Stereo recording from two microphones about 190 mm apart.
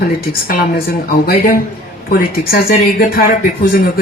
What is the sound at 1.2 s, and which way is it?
A woman's voice, 55° left (ahead or behind).